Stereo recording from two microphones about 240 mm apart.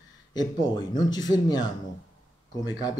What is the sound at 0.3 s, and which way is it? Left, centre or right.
Speech, centre.